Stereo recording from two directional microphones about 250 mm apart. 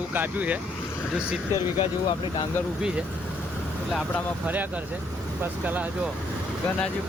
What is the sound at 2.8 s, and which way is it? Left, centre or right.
Speech, centre.